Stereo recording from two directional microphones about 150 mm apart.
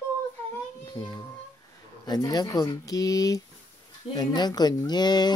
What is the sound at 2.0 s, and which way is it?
Speech, 25° left (ahead or behind).